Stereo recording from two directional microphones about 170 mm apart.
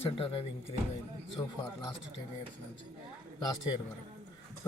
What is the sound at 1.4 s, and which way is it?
Speech, 20° left (ahead or behind).